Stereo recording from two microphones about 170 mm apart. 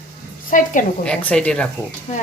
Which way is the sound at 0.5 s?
50° left (ahead or behind).